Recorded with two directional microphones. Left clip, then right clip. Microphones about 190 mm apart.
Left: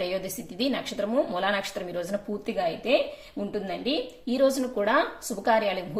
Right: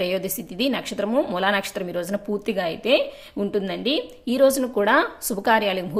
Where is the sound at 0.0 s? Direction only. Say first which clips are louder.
Right 5 dB; 35° right (ahead or behind).